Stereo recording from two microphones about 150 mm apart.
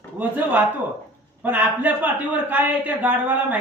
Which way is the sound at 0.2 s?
10° right (ahead or behind).